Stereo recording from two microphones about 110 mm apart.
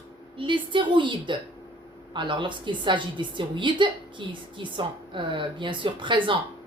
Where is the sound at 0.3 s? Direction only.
50° right (ahead or behind).